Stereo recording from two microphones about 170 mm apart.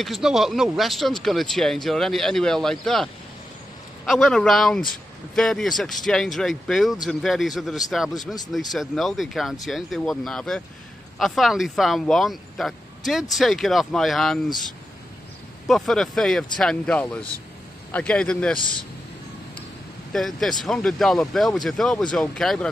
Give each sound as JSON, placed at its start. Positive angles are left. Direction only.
{"t": 0.0, "sound": "speech", "side_deg": 0}
{"t": 15.6, "sound": "a man's voice", "side_deg": 0}
{"t": 18.6, "sound": "speech", "side_deg": 30}
{"t": 20.1, "sound": "speech", "side_deg": 0}